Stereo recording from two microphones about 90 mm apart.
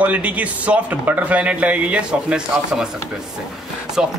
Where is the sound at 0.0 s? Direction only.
15° right (ahead or behind).